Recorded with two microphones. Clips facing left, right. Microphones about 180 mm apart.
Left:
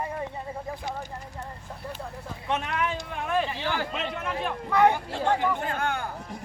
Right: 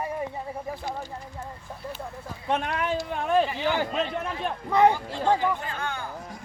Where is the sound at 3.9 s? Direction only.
40° right (ahead or behind).